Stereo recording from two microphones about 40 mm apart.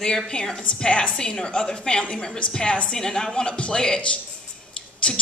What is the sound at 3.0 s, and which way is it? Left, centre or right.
Speech, centre.